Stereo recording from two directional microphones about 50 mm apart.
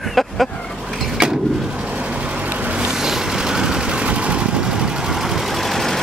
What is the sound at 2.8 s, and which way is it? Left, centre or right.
Vehicle, centre.